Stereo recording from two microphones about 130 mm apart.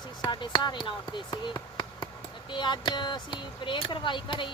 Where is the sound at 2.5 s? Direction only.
35° left (ahead or behind).